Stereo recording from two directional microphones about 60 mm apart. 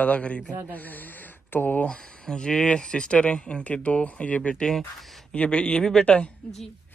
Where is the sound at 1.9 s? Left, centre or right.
Centre.